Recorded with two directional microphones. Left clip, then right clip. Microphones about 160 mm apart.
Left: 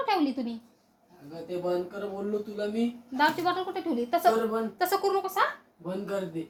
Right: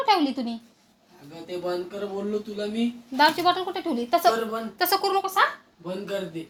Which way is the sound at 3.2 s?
45° right (ahead or behind).